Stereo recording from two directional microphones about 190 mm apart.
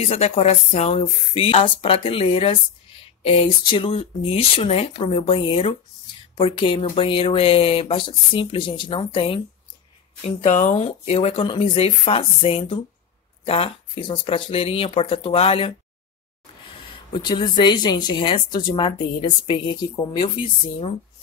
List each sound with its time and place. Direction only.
0.0 s speech: 30° left (ahead or behind)
10.2 s speech: 40° left (ahead or behind)
16.9 s speech: 25° left (ahead or behind)